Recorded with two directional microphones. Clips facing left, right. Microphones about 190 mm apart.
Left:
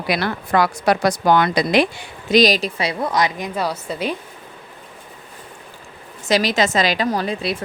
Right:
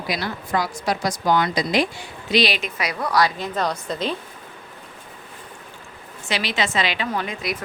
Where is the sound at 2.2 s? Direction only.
40° left (ahead or behind); by 4.1 s 10° left (ahead or behind).